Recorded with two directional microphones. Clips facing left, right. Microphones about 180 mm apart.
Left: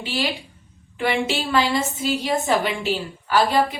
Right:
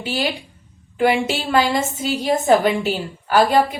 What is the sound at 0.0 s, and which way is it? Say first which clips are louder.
A woman's voice: right 2 dB; 45° right (ahead or behind).